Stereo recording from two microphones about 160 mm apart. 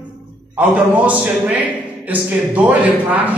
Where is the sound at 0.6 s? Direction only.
10° right (ahead or behind).